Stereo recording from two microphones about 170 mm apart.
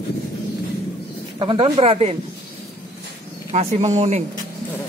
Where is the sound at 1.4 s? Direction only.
35° right (ahead or behind).